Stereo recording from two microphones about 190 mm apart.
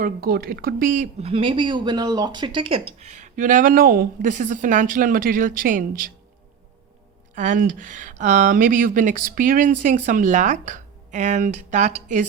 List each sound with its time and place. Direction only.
0.0 s speech: 50° right (ahead or behind)
7.3 s speech: 45° right (ahead or behind)